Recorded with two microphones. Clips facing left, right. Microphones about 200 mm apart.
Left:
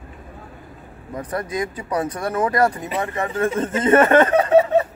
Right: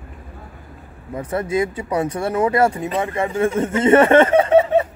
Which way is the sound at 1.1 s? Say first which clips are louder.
Right 4 dB; 25° right (ahead or behind).